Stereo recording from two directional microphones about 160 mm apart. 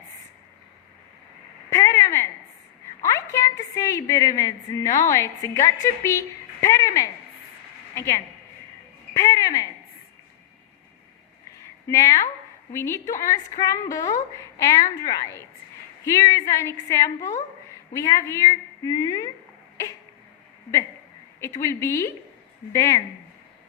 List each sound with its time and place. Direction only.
1.7 s a sound: 20° left (ahead or behind)
3.0 s a woman's voice: 20° left (ahead or behind)
11.9 s a woman's voice: 20° left (ahead or behind)
21.6 s a woman's voice: 20° left (ahead or behind)